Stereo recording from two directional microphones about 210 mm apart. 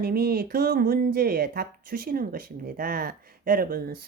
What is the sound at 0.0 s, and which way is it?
Speech, 45° right (ahead or behind).